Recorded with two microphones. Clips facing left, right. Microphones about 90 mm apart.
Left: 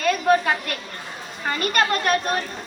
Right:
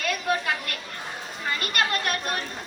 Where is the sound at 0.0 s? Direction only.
30° left (ahead or behind).